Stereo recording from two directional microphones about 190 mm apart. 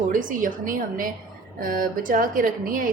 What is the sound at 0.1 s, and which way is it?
A woman's voice, 45° right (ahead or behind).